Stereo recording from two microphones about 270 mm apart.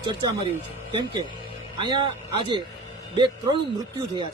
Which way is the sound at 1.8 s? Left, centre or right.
Centre.